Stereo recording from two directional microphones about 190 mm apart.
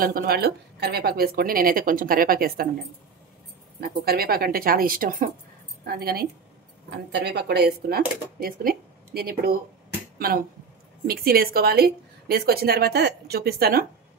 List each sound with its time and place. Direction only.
0.0 s speech: 50° right (ahead or behind)
3.8 s a woman's voice: 55° right (ahead or behind)